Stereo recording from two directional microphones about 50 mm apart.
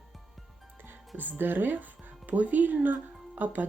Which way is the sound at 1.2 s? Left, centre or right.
Right.